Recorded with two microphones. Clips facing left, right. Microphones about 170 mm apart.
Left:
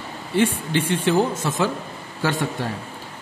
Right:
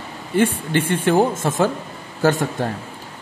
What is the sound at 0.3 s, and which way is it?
A man's voice, 50° right (ahead or behind).